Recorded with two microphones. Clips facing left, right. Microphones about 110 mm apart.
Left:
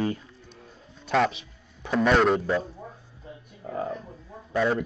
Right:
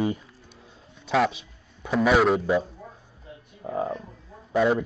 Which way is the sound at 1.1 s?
Centre (ahead or behind).